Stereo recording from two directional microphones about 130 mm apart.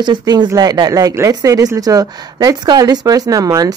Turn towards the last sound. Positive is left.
turn(degrees=-30)  # may be behind; listen again after turning